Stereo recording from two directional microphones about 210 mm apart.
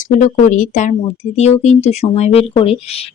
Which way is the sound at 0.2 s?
35° left (ahead or behind).